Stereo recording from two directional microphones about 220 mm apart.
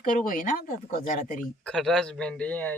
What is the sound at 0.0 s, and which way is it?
Speech, 35° left (ahead or behind).